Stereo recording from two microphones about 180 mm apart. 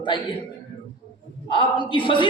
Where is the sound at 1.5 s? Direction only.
25° left (ahead or behind).